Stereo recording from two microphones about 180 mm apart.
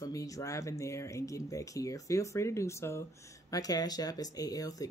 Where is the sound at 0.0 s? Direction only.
20° left (ahead or behind).